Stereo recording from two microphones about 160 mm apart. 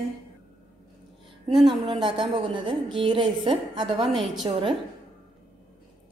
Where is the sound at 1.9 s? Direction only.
30° right (ahead or behind).